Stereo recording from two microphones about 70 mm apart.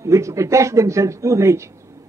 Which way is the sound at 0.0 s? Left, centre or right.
Right.